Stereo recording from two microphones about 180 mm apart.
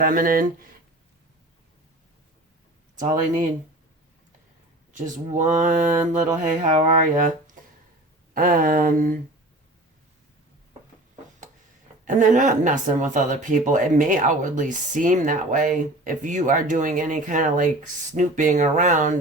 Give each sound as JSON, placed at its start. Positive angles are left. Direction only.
{"t": 0.0, "sound": "speech", "side_deg": -50}
{"t": 2.9, "sound": "speech", "side_deg": -45}
{"t": 4.9, "sound": "speech", "side_deg": -45}
{"t": 12.0, "sound": "speech", "side_deg": -45}